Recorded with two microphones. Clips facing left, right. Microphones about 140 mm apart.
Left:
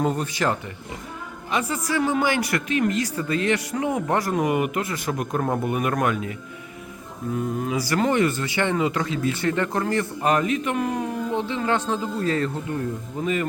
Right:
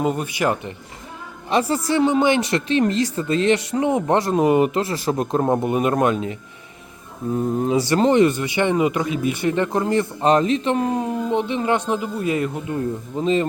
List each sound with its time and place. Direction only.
0.0 s speech: 10° right (ahead or behind)
1.5 s speech: 35° right (ahead or behind)
7.3 s speech: 30° right (ahead or behind)